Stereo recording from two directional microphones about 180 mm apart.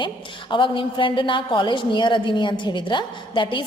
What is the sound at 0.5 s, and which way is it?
A woman's voice, 25° left (ahead or behind).